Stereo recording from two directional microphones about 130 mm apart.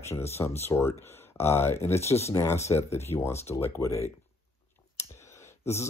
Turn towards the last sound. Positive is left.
turn(degrees=20)  # may be behind; listen again after turning